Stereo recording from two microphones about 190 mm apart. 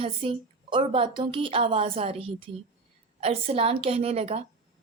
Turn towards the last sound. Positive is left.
turn(degrees=-35)  # may be behind; listen again after turning